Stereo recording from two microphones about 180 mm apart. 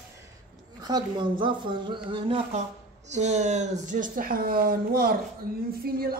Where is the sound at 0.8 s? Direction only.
25° right (ahead or behind).